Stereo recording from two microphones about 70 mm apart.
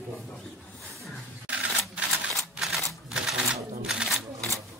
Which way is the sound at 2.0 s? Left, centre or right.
Centre.